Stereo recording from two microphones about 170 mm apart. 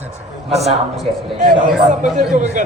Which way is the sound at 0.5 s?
40° right (ahead or behind).